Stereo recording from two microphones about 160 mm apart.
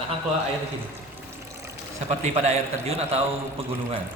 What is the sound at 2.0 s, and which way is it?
A man's voice, 45° right (ahead or behind).